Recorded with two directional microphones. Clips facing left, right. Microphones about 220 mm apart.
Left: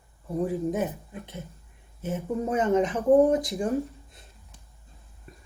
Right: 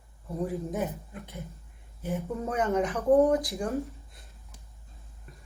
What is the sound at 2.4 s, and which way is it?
A woman's voice, 15° left (ahead or behind).